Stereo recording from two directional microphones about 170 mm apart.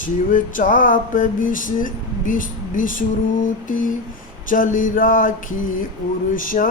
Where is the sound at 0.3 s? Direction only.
50° left (ahead or behind).